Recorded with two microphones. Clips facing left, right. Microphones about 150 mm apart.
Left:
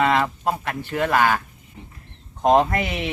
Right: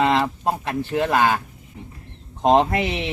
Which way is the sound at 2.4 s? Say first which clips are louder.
Even; 25° right (ahead or behind).